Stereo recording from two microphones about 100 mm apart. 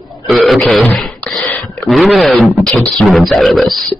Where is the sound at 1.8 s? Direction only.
Centre (ahead or behind).